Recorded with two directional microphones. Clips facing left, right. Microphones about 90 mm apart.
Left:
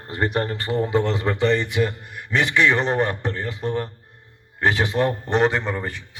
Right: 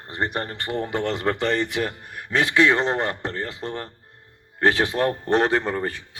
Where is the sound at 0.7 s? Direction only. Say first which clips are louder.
Left 3 dB; 55° right (ahead or behind).